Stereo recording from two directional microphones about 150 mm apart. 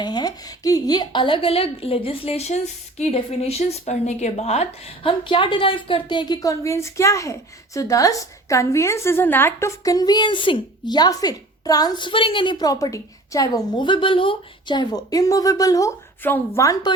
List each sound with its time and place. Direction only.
0.0 s a woman's voice: 30° left (ahead or behind); by 5.1 s 45° left (ahead or behind)
5.2 s speech: 35° left (ahead or behind)